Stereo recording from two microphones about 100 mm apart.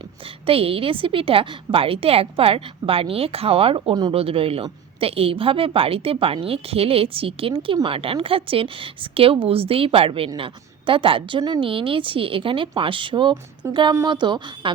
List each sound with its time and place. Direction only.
0.4 s a woman's voice: 70° right (ahead or behind)
3.8 s a woman's voice: 50° right (ahead or behind)
4.1 s a woman's voice: 75° right (ahead or behind); by 11.7 s 50° right (ahead or behind)
11.7 s a woman's voice: 60° right (ahead or behind)
13.6 s speech: 30° right (ahead or behind)
14.1 s a woman's voice: 50° right (ahead or behind)